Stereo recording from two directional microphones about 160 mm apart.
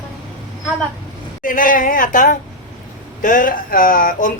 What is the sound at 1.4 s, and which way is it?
Speech, 60° left (ahead or behind).